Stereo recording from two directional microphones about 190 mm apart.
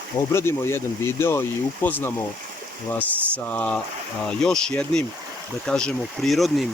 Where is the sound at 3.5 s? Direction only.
5° left (ahead or behind).